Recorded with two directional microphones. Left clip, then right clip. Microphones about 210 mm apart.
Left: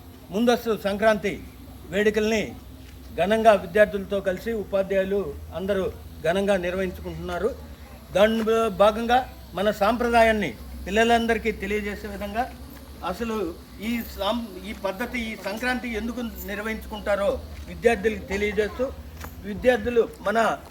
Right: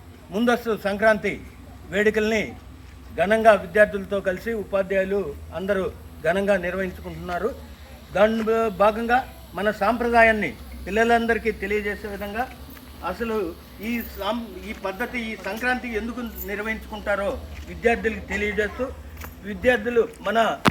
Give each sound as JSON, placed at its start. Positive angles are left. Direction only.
{"t": 0.3, "sound": "speech", "side_deg": 10}
{"t": 2.1, "sound": "speech", "side_deg": 10}
{"t": 3.2, "sound": "speech", "side_deg": 20}
{"t": 4.1, "sound": "a man's voice", "side_deg": 0}
{"t": 6.3, "sound": "a man's voice", "side_deg": 15}
{"t": 8.4, "sound": "a man's voice", "side_deg": 45}
{"t": 19.2, "sound": "speech", "side_deg": 10}